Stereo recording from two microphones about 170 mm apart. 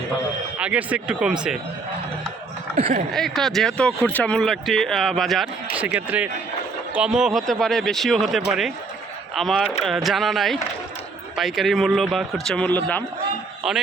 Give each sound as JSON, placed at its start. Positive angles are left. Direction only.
{"t": 0.6, "sound": "speech", "side_deg": -10}
{"t": 2.7, "sound": "speech", "side_deg": -45}
{"t": 3.1, "sound": "speech", "side_deg": 0}